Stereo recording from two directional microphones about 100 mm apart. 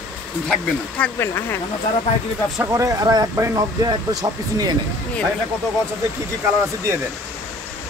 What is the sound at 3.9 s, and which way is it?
Speech, 40° right (ahead or behind).